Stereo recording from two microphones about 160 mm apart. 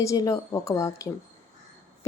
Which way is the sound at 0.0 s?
20° left (ahead or behind).